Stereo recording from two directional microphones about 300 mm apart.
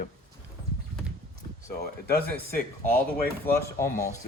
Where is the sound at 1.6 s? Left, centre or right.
Left.